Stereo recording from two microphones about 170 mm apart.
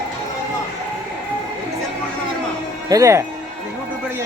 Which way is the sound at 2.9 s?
20° right (ahead or behind).